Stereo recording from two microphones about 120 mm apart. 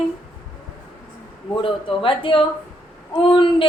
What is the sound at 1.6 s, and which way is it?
Speech, 45° left (ahead or behind).